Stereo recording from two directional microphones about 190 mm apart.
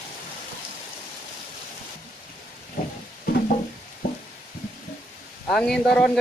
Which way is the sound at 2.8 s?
50° left (ahead or behind).